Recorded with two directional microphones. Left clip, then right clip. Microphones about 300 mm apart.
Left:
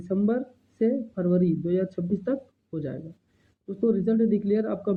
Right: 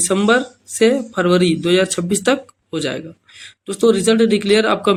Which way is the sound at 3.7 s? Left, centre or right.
Centre.